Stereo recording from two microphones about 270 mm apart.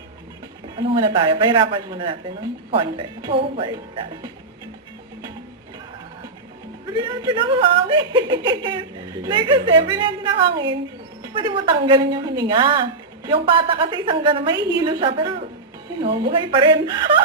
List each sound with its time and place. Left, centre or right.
0.8 s a woman's voice: centre
6.9 s a woman's voice: centre